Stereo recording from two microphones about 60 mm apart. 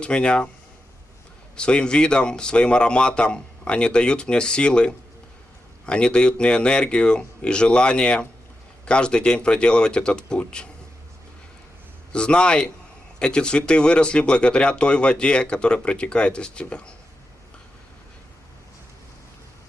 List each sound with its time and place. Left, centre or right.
0.0 s speech: centre
1.5 s speech: centre
12.1 s speech: centre